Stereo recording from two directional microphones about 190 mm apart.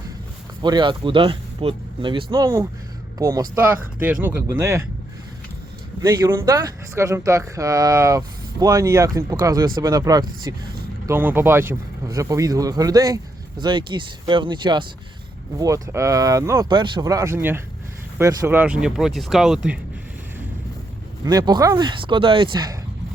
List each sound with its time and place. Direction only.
0.6 s speech: 25° right (ahead or behind)
6.0 s speech: 15° right (ahead or behind)
21.2 s speech: 20° right (ahead or behind)